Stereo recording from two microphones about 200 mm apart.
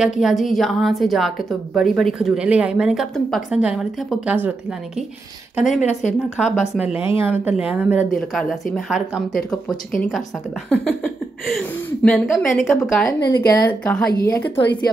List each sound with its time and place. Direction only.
0.0 s a woman's voice: centre (ahead or behind)
5.7 s speech: 35° left (ahead or behind)
6.3 s a woman's voice: 5° right (ahead or behind)
10.7 s a woman's voice: 5° left (ahead or behind)
13.5 s speech: 15° left (ahead or behind)
13.8 s a woman's voice: 5° left (ahead or behind)
14.1 s speech: 50° left (ahead or behind)